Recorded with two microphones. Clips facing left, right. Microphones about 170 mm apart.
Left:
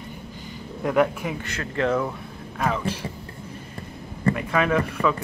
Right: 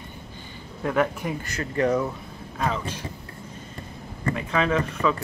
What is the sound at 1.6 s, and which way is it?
Speech, 15° right (ahead or behind).